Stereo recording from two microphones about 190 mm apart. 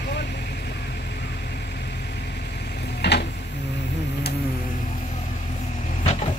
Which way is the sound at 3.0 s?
60° left (ahead or behind).